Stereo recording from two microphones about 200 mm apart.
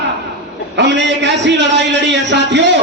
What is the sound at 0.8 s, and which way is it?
A man's voice, 60° right (ahead or behind).